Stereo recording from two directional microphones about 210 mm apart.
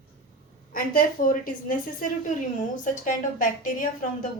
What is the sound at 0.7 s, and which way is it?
A woman's voice, 40° left (ahead or behind).